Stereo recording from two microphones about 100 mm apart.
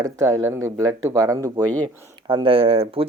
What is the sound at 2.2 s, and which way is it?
Speech, 60° right (ahead or behind).